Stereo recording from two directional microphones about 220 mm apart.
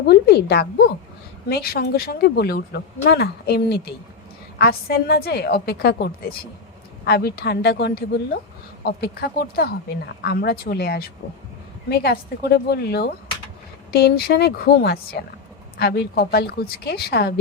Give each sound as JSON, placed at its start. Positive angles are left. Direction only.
{"t": 0.0, "sound": "speech", "side_deg": 45}